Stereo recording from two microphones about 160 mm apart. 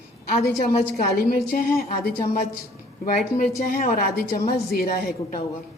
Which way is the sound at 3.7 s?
65° left (ahead or behind).